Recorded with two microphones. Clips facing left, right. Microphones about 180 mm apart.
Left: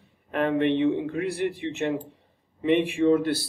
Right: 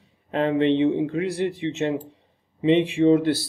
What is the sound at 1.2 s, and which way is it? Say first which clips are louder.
Speech: right 3 dB; 60° left (ahead or behind).